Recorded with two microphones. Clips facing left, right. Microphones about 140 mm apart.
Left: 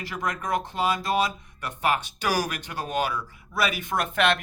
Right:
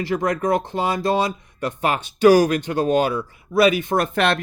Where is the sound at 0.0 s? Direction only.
30° right (ahead or behind).